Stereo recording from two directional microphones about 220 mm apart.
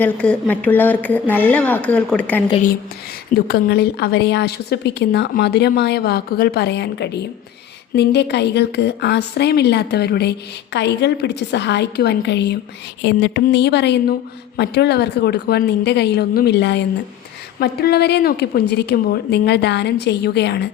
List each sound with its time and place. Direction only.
0.0 s speech: 5° left (ahead or behind)
3.3 s a woman's voice: 45° left (ahead or behind)